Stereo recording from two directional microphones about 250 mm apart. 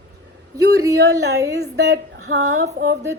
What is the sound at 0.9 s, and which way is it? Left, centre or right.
Speech, right.